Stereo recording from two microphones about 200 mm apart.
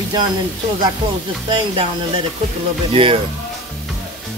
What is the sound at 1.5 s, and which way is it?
Speech, 25° right (ahead or behind).